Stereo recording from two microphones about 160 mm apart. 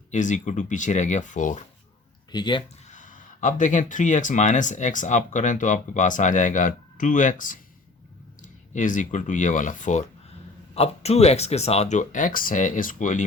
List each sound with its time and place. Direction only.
0.1 s speech: 50° left (ahead or behind)
2.3 s speech: 30° left (ahead or behind)
2.9 s speech: 55° left (ahead or behind)